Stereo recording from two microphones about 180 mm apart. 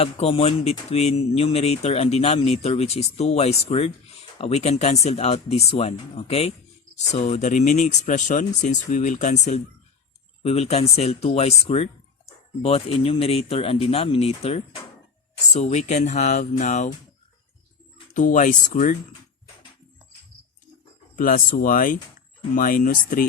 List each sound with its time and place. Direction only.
0.0 s speech: 35° left (ahead or behind)
17.9 s speech: 45° left (ahead or behind)
21.2 s speech: 45° left (ahead or behind)